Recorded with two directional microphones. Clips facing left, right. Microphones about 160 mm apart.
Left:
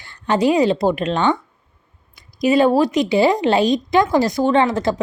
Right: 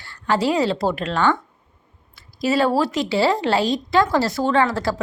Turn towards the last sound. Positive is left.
turn(degrees=20)  # may be behind; listen again after turning